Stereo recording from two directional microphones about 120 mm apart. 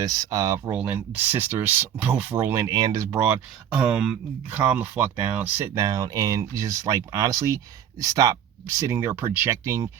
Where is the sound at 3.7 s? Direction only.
5° right (ahead or behind).